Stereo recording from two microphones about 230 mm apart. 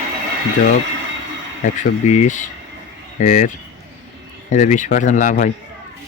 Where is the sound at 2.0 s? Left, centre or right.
Left.